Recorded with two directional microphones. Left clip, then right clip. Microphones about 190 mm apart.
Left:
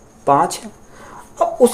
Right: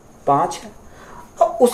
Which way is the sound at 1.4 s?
35° left (ahead or behind).